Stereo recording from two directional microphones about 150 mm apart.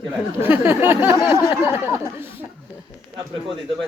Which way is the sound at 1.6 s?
15° right (ahead or behind).